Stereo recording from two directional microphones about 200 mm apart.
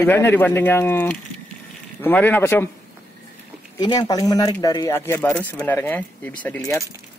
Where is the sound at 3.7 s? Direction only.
20° left (ahead or behind).